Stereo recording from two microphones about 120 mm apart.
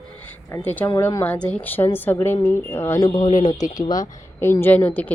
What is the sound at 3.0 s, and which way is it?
Speech, 40° left (ahead or behind).